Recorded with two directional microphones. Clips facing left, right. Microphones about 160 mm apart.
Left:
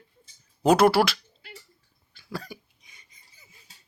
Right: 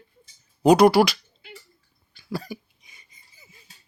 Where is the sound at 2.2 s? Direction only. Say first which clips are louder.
Right 5 dB; centre (ahead or behind).